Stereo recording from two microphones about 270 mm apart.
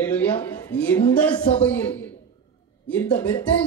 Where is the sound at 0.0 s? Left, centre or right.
Centre.